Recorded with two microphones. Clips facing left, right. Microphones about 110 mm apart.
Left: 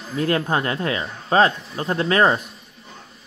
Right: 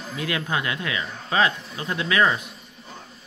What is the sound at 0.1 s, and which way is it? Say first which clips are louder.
Speech: left 6 dB; 40° left (ahead or behind).